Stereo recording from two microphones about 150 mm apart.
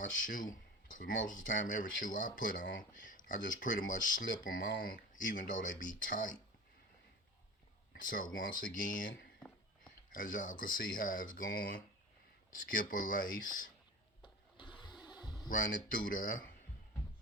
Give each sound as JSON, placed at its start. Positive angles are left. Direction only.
{"t": 0.0, "sound": "speech", "side_deg": 60}
{"t": 4.4, "sound": "speech", "side_deg": 75}
{"t": 7.9, "sound": "speech", "side_deg": 65}
{"t": 12.7, "sound": "speech", "side_deg": 65}
{"t": 14.2, "sound": "a sound", "side_deg": 30}
{"t": 15.4, "sound": "speech", "side_deg": 70}